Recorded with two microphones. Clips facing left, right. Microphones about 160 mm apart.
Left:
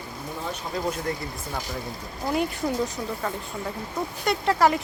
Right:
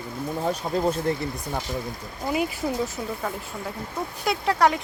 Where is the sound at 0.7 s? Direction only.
45° right (ahead or behind).